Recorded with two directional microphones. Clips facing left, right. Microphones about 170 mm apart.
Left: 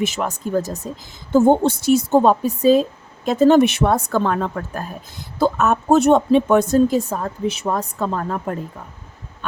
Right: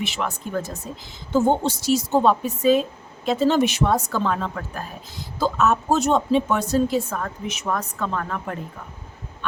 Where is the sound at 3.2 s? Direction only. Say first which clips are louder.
Left 6 dB; 50° left (ahead or behind).